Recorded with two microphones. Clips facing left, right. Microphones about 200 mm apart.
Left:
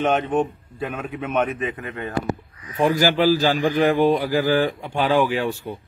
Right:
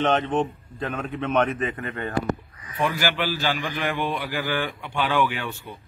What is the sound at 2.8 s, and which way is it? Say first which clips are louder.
A man's voice: left 7 dB; 40° left (ahead or behind).